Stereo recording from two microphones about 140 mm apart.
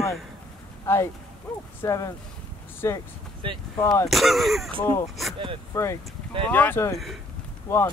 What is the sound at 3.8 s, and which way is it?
Speech, 20° left (ahead or behind).